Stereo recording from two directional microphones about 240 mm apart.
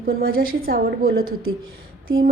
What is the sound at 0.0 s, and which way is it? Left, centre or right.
A woman's voice, right.